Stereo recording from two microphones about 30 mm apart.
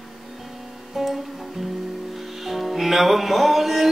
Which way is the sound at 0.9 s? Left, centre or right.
Centre.